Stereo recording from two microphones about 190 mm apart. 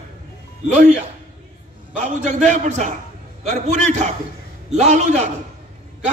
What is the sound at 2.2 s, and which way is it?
A man's voice, 40° right (ahead or behind).